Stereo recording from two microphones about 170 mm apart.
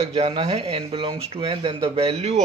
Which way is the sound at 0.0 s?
35° right (ahead or behind).